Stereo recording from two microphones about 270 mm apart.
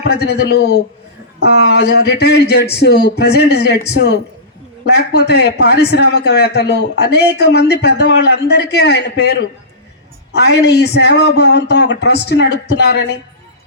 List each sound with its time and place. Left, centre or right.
0.1 s a man's voice: left